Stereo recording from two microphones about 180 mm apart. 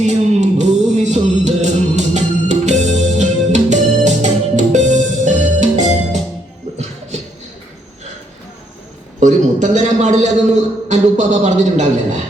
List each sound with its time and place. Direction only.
0.0 s music: 40° right (ahead or behind)
9.2 s a man's voice: 40° right (ahead or behind)